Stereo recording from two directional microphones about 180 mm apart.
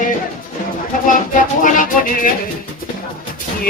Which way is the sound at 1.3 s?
45° left (ahead or behind).